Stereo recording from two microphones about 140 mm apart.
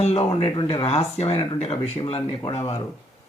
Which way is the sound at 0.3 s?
35° left (ahead or behind).